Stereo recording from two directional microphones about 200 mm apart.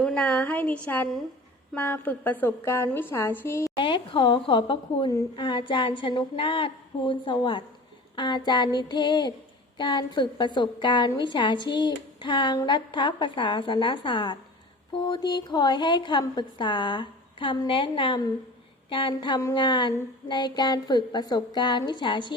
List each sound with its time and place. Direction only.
0.0 s a woman's voice: 5° left (ahead or behind)
3.8 s a woman's voice: 25° left (ahead or behind)